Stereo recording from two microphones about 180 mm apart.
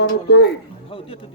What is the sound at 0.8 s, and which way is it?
Speech, 30° left (ahead or behind).